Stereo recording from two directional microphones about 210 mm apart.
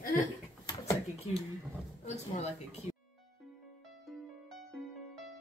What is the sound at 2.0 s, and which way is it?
Speech, 35° left (ahead or behind).